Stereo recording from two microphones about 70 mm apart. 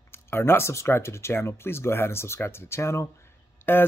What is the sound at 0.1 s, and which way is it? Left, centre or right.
Speech, left.